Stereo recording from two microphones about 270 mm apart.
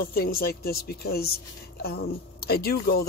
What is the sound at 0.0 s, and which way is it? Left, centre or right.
Speech, left.